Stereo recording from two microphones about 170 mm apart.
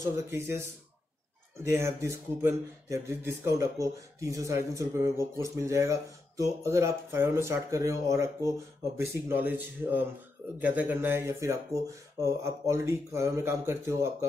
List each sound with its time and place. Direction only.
0.1 s speech: 15° right (ahead or behind)